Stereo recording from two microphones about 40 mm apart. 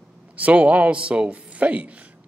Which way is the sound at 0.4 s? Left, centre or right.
Right.